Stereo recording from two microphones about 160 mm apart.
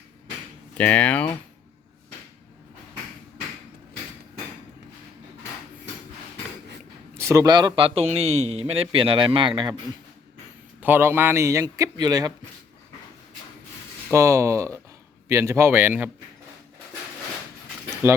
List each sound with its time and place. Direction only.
0.8 s speech: 10° left (ahead or behind)
7.1 s a man's voice: 15° right (ahead or behind); by 9.5 s 35° right (ahead or behind)
10.8 s speech: 10° right (ahead or behind)
14.1 s speech: 20° right (ahead or behind)
18.0 s speech: 15° right (ahead or behind)